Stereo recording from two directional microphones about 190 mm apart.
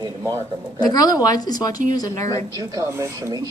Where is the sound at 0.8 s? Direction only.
20° left (ahead or behind).